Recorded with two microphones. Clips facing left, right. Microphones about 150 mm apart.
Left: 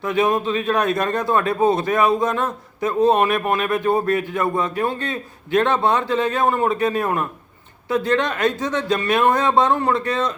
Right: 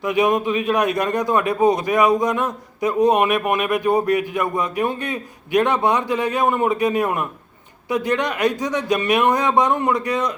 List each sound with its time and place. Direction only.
0.0 s a man's voice: 15° right (ahead or behind)